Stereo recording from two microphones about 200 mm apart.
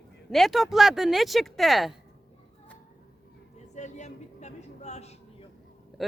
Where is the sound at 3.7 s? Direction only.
35° left (ahead or behind).